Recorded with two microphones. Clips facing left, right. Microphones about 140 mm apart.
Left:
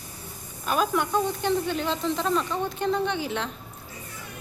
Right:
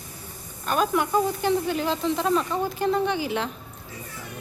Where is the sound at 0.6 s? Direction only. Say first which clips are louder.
Right 1 dB; centre (ahead or behind).